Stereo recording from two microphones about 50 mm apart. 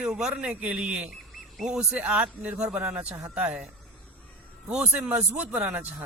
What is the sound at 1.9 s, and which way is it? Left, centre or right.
Speech, right.